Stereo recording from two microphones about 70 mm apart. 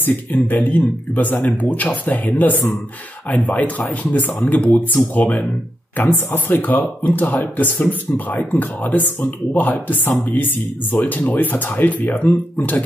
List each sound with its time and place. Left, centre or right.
0.0 s speech: left